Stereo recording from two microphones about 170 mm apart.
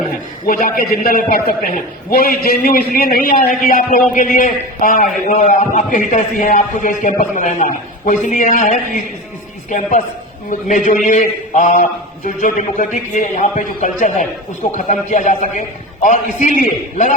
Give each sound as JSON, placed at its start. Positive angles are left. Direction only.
{"t": 0.4, "sound": "a man's voice", "side_deg": 55}